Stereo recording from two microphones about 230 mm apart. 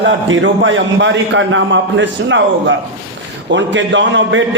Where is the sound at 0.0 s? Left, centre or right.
Right.